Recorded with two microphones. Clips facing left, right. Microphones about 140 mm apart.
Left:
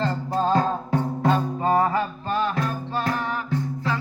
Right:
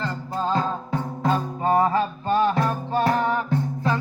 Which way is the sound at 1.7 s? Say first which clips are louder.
Right 2 dB; 25° right (ahead or behind).